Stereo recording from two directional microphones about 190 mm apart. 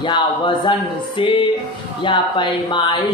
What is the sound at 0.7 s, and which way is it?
Speech, 25° left (ahead or behind).